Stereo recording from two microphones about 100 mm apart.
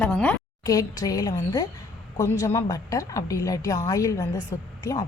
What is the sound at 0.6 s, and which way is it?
A woman's voice, 40° left (ahead or behind).